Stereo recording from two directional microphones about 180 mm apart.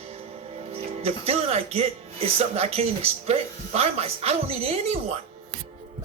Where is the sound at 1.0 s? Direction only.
35° right (ahead or behind).